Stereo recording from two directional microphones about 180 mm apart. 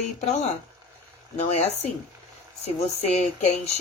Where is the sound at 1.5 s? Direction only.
35° left (ahead or behind).